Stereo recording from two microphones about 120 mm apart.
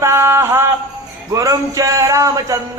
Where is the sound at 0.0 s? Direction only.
20° right (ahead or behind).